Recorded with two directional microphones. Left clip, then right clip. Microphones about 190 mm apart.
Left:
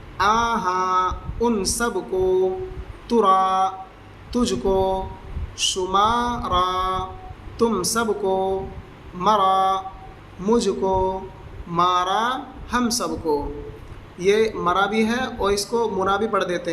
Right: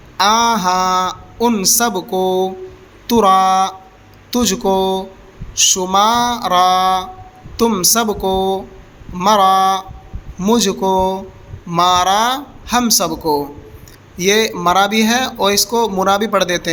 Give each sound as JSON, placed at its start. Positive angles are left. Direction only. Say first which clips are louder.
{"t": 0.2, "sound": "a man's voice", "louder": "right 6 dB", "side_deg": -45}